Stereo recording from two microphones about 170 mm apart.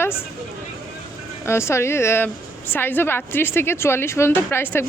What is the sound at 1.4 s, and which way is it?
Speech, 15° left (ahead or behind).